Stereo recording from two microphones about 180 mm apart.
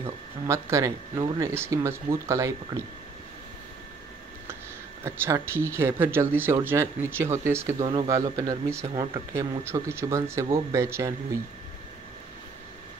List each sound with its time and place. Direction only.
0.0 s speech: 15° right (ahead or behind)
5.0 s speech: 15° right (ahead or behind)
7.8 s speech: 30° right (ahead or behind)
8.1 s speech: 20° right (ahead or behind)